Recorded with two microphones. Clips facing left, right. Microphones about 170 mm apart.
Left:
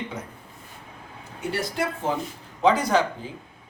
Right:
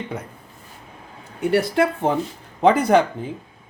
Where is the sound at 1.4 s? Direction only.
60° right (ahead or behind).